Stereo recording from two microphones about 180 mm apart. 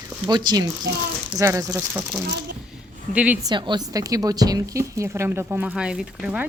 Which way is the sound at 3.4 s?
25° right (ahead or behind).